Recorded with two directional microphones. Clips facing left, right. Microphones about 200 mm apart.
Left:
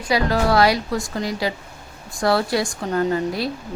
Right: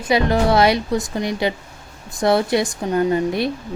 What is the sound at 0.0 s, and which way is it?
Speech, 20° right (ahead or behind).